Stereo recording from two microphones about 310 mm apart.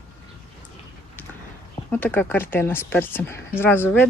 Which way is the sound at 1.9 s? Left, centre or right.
Centre.